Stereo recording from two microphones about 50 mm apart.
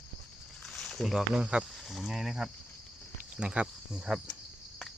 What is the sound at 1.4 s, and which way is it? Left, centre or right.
Speech, centre.